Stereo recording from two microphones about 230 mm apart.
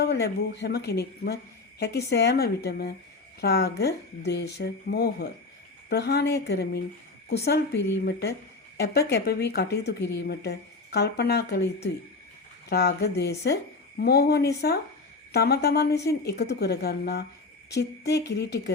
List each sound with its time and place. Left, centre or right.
0.0 s a woman's voice: left